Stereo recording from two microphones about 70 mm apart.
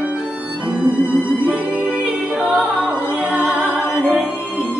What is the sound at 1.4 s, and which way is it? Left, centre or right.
Music, centre.